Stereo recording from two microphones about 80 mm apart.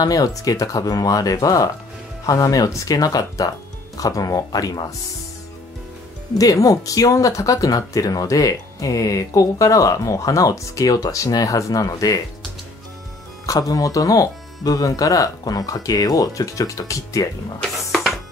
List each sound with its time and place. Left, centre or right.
0.0 s speech: left
6.3 s speech: left
13.5 s speech: left